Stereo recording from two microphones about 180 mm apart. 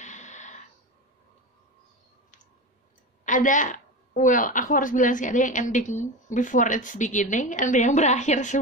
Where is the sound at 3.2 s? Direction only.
45° left (ahead or behind).